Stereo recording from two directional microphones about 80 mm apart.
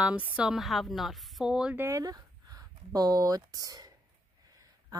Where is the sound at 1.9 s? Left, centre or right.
Right.